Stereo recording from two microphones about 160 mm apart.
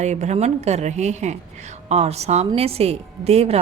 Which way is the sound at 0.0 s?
45° right (ahead or behind).